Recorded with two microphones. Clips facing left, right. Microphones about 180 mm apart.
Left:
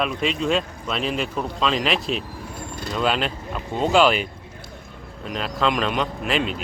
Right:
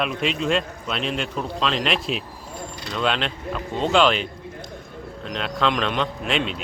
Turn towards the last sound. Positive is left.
turn(degrees=0)  # may be behind; listen again after turning